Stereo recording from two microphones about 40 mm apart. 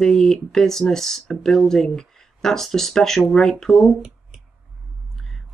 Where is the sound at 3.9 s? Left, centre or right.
Right.